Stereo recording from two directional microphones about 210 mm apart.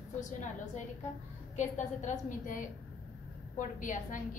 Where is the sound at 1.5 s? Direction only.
35° left (ahead or behind).